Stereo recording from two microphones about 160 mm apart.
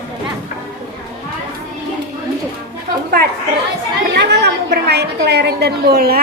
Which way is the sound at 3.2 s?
80° right.